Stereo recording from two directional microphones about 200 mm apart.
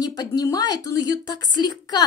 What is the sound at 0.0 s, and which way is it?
Speech, 20° left (ahead or behind).